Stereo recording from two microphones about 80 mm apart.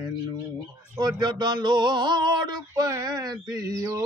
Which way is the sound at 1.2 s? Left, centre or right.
Right.